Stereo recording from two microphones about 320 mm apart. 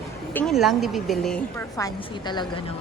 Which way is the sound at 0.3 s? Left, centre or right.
Centre.